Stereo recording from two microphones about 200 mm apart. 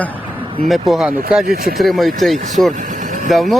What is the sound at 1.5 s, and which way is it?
Speech, 50° right (ahead or behind).